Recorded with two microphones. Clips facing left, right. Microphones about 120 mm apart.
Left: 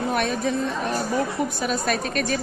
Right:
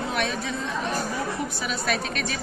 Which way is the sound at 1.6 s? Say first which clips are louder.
Left 1 dB; 45° left (ahead or behind).